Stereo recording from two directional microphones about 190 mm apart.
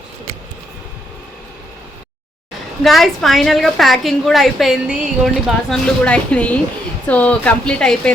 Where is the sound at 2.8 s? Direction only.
Centre (ahead or behind).